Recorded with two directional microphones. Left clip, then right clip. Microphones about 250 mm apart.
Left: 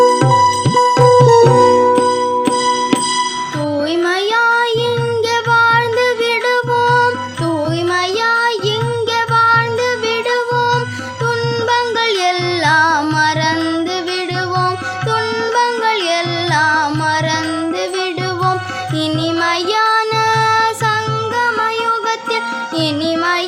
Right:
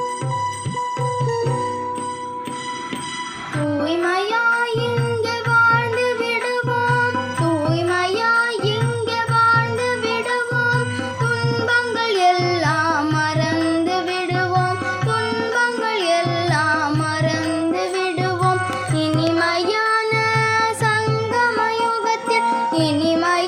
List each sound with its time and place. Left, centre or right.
0.0 s music: left
4.0 s child singing: left
5.5 s music: left
8.2 s music: left
12.2 s music: left
15.5 s music: left
19.4 s music: centre